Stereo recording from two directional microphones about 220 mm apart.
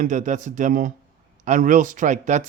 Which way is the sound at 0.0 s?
35° right (ahead or behind).